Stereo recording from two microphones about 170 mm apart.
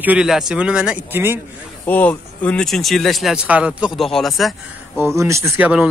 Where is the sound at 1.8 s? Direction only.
10° left (ahead or behind).